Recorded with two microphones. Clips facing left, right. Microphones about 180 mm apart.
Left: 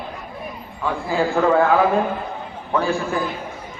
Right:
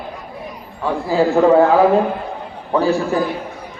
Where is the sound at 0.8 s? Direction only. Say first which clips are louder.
Right 5 dB; 35° right (ahead or behind).